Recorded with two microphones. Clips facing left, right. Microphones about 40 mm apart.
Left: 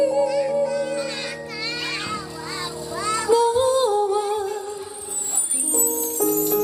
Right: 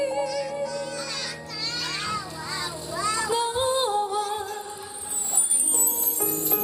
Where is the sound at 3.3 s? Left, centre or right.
Right.